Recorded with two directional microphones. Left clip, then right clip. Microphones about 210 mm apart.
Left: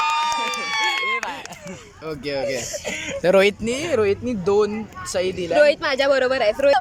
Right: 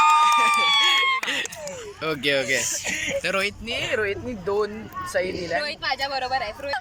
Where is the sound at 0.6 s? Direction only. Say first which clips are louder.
Right 3 dB; 45° left (ahead or behind).